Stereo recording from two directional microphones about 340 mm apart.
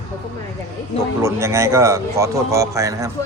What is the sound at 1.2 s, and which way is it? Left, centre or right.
A man's voice, centre.